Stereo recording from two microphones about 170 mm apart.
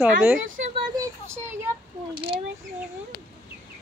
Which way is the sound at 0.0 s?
15° right (ahead or behind).